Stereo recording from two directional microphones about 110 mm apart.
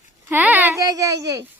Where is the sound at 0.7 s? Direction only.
30° right (ahead or behind).